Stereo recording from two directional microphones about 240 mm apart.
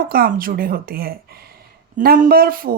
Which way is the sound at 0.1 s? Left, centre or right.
Right.